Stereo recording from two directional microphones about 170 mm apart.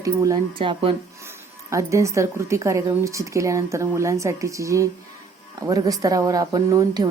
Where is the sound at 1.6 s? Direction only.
20° right (ahead or behind).